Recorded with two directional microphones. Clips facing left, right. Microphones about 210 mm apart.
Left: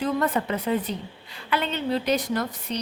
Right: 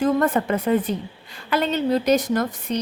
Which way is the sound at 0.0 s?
50° right (ahead or behind).